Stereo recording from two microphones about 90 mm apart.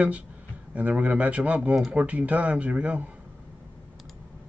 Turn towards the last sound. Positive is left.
turn(degrees=-15)  # may be behind; listen again after turning